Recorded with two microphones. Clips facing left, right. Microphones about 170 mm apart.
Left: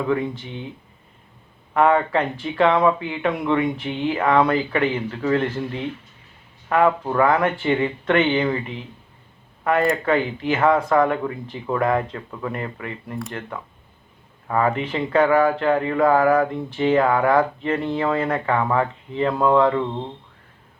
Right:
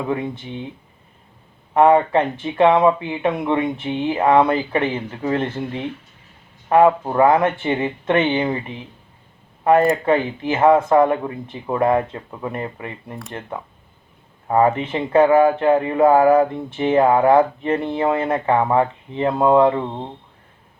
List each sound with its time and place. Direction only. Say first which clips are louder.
0.1 s speech: left 1 dB; 20° right (ahead or behind)
1.7 s speech: right 4 dB; 25° right (ahead or behind)
9.9 s speech: right 2 dB; 25° right (ahead or behind)
14.4 s speech: right 4 dB; 25° right (ahead or behind)